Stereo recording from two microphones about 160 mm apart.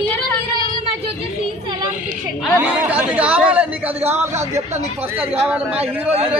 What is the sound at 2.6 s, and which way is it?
Speech, 10° right (ahead or behind).